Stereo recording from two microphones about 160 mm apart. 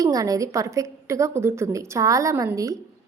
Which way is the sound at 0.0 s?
20° right (ahead or behind).